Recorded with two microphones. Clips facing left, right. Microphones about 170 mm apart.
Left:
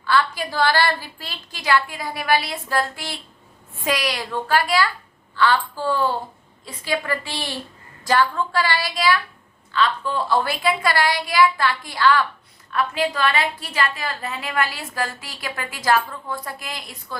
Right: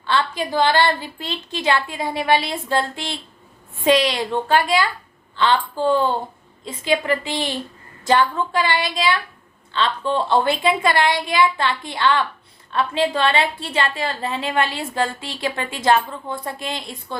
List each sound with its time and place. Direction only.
0.0 s a woman's voice: 25° right (ahead or behind)